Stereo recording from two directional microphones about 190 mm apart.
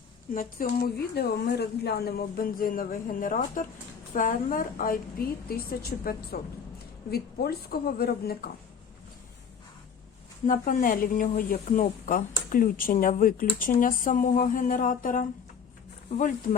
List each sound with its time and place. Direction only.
0.3 s a woman's voice: 50° left (ahead or behind)
10.4 s speech: 45° left (ahead or behind)